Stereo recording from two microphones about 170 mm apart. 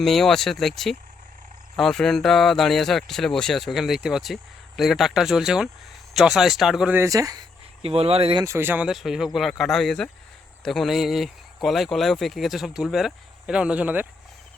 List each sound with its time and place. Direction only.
0.0 s speech: centre (ahead or behind); by 7.4 s 20° right (ahead or behind)
7.8 s speech: 35° right (ahead or behind)
8.4 s speech: 15° right (ahead or behind)